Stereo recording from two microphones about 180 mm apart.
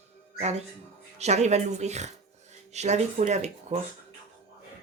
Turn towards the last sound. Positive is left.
turn(degrees=-40)  # may be behind; listen again after turning